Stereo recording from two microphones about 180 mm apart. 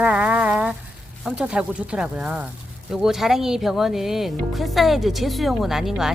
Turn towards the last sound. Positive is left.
turn(degrees=0)  # may be behind; listen again after turning